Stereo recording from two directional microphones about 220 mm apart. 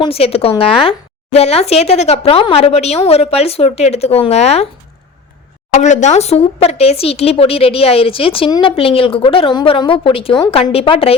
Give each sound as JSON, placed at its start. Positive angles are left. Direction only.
{"t": 0.0, "sound": "speech", "side_deg": 25}
{"t": 5.7, "sound": "speech", "side_deg": 35}